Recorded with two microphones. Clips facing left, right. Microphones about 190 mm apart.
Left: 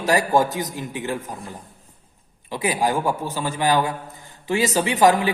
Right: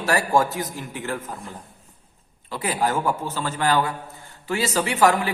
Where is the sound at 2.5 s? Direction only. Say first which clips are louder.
Left 2 dB; 15° left (ahead or behind).